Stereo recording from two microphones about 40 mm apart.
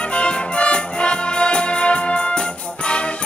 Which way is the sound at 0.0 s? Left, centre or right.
Left.